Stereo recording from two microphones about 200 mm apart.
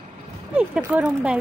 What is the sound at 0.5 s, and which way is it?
Speech, 5° right (ahead or behind).